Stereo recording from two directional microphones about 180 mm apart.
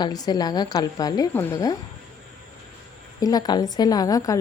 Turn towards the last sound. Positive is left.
turn(degrees=20)  # may be behind; listen again after turning